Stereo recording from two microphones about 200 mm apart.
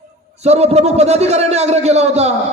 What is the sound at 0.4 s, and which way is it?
A man's voice, 35° right (ahead or behind).